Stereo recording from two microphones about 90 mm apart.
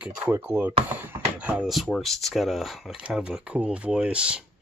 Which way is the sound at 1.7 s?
Centre (ahead or behind).